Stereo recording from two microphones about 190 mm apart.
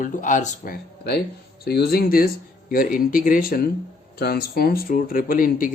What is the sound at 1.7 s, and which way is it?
Speech, 55° left (ahead or behind).